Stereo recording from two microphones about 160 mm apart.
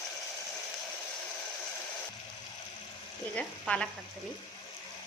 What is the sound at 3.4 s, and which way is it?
Frying, 5° left (ahead or behind).